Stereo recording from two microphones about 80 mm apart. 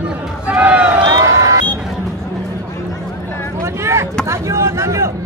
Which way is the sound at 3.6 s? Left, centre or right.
Right.